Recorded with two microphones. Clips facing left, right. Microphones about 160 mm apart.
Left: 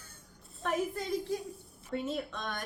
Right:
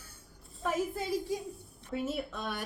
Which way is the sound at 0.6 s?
5° right (ahead or behind).